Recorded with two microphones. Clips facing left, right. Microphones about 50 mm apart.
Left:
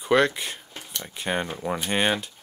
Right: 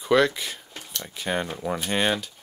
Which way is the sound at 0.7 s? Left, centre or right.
Centre.